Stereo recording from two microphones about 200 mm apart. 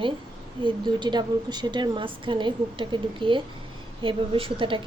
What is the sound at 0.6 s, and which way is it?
A woman's voice, 20° right (ahead or behind).